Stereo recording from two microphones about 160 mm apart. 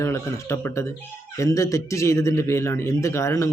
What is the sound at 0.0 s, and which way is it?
Speech, 15° left (ahead or behind).